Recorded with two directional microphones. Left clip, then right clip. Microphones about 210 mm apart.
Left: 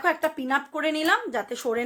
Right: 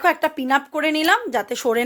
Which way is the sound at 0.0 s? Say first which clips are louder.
Right 5 dB; 35° right (ahead or behind).